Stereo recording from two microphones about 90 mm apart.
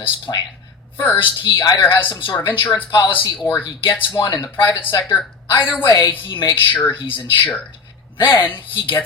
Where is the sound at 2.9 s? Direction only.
55° left (ahead or behind).